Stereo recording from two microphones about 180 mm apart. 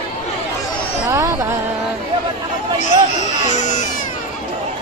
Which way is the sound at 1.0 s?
15° right (ahead or behind).